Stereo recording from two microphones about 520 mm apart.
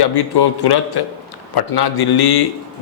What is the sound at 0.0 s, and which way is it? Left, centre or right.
A man's voice, left.